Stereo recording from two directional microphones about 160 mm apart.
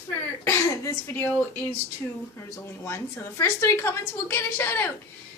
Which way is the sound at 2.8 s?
15° left (ahead or behind).